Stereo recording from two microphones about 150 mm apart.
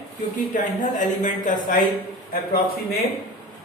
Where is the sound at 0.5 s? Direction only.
60° left (ahead or behind).